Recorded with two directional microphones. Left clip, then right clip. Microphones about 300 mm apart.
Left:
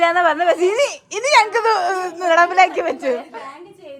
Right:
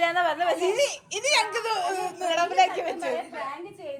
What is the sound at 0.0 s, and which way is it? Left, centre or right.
A woman's voice, left.